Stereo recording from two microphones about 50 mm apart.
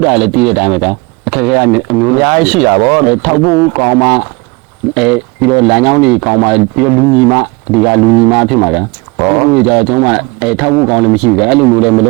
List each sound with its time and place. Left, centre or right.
0.0 s speech: centre